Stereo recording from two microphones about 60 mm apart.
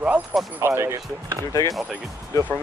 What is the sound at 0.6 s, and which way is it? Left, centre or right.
Speech, right.